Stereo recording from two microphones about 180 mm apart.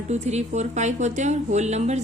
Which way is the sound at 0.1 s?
40° right (ahead or behind).